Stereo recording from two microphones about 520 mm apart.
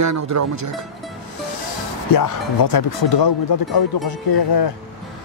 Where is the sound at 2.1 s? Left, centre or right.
Left.